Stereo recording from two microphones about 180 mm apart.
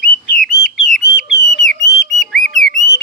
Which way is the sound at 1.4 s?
70° left (ahead or behind).